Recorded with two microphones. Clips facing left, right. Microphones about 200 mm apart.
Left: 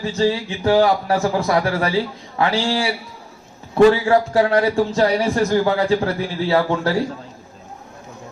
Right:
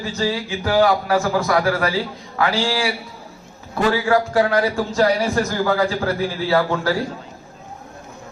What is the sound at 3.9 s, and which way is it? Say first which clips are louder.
Speech: left 2 dB; 25° left (ahead or behind).